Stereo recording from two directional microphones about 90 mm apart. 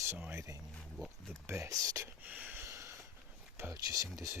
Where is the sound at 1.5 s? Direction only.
35° right (ahead or behind).